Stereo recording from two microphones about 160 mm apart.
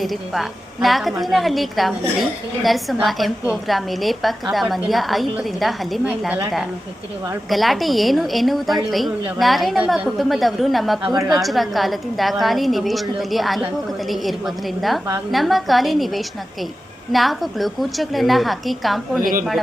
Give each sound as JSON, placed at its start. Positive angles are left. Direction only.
{"t": 0.0, "sound": "a woman's voice", "side_deg": 0}
{"t": 7.5, "sound": "a woman's voice", "side_deg": 0}
{"t": 11.0, "sound": "a woman's voice", "side_deg": -25}
{"t": 11.3, "sound": "a woman's voice", "side_deg": 0}
{"t": 19.2, "sound": "speech", "side_deg": -60}